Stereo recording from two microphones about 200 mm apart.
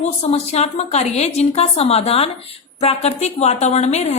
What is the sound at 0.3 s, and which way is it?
A woman's voice, 30° left (ahead or behind).